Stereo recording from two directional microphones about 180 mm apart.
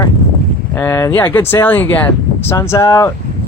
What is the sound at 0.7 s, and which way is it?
Speech, 15° left (ahead or behind).